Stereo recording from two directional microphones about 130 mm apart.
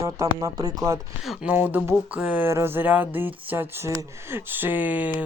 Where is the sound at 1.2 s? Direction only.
10° right (ahead or behind).